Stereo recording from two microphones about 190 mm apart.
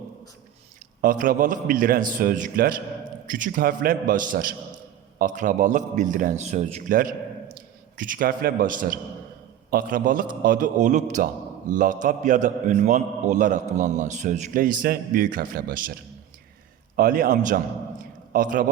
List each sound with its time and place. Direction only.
1.0 s a man's voice: 45° right (ahead or behind)
17.0 s a man's voice: 50° right (ahead or behind)